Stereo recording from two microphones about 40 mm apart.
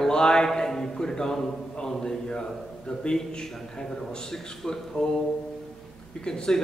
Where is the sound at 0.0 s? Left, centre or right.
Centre.